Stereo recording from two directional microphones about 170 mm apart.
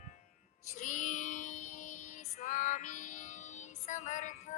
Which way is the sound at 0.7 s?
50° left (ahead or behind).